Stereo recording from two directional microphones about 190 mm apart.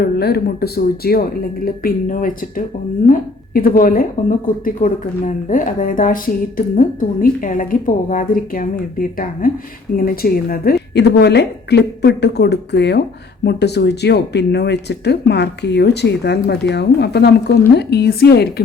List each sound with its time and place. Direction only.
0.0 s a woman's voice: 55° left (ahead or behind)